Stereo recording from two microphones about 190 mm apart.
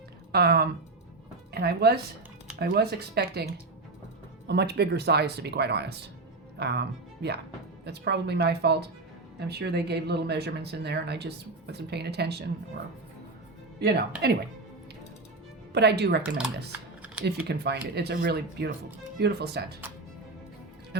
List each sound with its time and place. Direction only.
0.3 s speech: 55° right (ahead or behind)
4.4 s speech: 60° right (ahead or behind)
13.7 s speech: 60° right (ahead or behind)
15.7 s speech: 60° right (ahead or behind)
16.7 s speech: 10° right (ahead or behind)
17.5 s speech: 60° right (ahead or behind)